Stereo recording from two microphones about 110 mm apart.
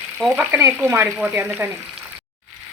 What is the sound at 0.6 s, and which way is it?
Frying, 20° right (ahead or behind).